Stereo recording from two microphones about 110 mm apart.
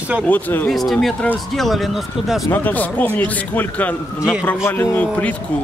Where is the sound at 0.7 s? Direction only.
Centre (ahead or behind).